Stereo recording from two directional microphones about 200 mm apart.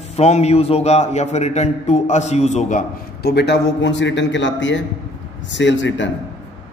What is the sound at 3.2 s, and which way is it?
A man's voice, 55° left (ahead or behind).